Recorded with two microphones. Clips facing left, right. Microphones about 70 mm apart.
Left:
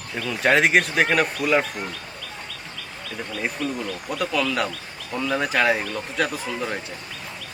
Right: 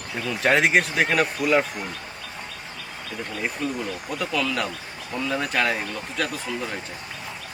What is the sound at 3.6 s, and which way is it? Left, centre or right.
Speech, right.